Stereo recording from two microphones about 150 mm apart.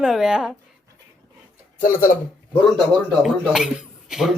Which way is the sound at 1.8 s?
65° left (ahead or behind).